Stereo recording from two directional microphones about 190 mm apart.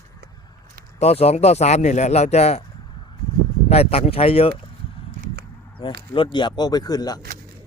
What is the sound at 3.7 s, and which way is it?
Speech, 30° left (ahead or behind).